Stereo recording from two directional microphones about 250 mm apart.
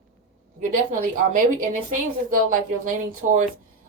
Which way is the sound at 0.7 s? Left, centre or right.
Right.